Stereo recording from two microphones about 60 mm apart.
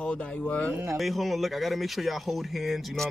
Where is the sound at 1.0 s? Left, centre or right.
Centre.